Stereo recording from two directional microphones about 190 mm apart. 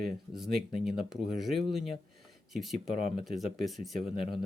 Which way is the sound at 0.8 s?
Centre (ahead or behind).